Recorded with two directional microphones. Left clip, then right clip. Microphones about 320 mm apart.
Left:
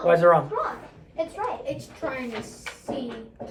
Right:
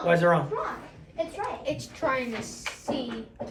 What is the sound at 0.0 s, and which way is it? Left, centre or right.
Speech, centre.